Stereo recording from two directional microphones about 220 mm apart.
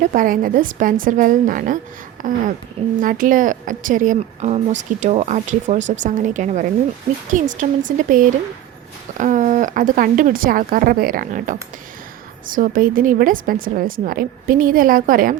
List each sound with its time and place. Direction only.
0.0 s a woman's voice: 40° right (ahead or behind)